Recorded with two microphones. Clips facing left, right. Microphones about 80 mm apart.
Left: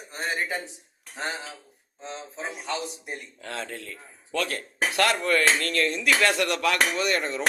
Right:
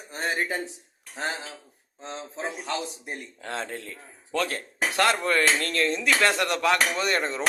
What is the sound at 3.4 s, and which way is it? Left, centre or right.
A man's voice, right.